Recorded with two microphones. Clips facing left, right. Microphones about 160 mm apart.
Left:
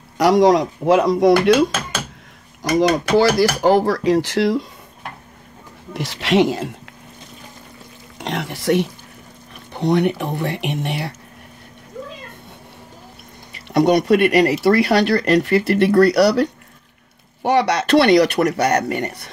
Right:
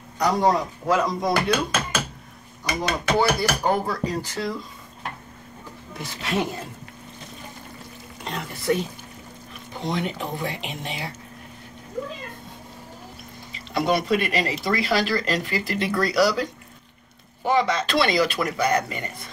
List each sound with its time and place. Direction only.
0.2 s speech: 90° left
5.9 s speech: 80° left
8.2 s speech: 75° left (ahead or behind)
9.7 s speech: 65° left (ahead or behind)
13.7 s speech: 65° left (ahead or behind)